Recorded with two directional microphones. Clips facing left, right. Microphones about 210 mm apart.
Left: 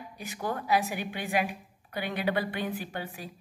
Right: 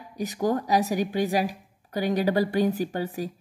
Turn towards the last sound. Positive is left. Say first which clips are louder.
# right 10 dB
turn(degrees=-40)  # may be behind; listen again after turning